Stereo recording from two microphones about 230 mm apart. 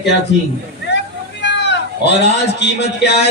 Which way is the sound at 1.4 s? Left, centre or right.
Left.